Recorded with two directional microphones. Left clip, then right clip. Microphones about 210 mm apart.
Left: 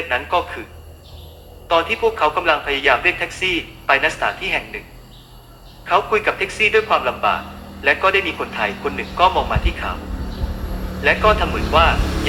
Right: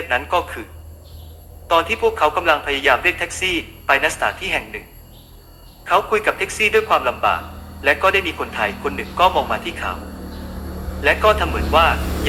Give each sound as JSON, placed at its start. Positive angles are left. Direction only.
{"t": 0.1, "sound": "speech", "side_deg": -15}
{"t": 1.6, "sound": "speech", "side_deg": -15}
{"t": 5.8, "sound": "speech", "side_deg": -15}
{"t": 11.0, "sound": "speech", "side_deg": -15}